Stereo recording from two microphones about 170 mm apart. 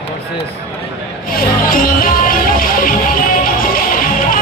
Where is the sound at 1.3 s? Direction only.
55° left (ahead or behind).